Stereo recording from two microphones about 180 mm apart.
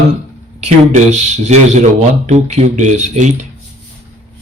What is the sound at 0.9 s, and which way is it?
Speech, 40° right (ahead or behind).